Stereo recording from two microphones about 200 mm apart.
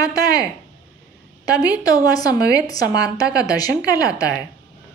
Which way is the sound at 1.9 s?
20° left (ahead or behind).